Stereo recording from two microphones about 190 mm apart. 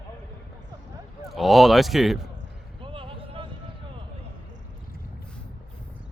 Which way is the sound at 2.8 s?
30° right (ahead or behind).